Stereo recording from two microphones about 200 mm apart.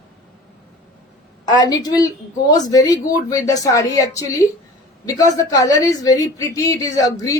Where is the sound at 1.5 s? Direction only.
20° left (ahead or behind).